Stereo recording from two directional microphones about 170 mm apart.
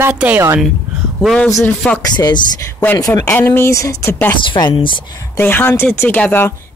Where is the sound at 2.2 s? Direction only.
25° left (ahead or behind).